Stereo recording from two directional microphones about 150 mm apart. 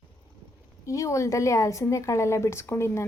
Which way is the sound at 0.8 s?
20° left (ahead or behind).